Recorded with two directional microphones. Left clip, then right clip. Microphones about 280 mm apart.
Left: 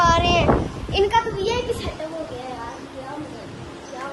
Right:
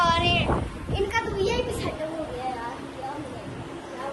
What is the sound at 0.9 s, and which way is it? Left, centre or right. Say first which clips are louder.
Speech: left 8 dB; left.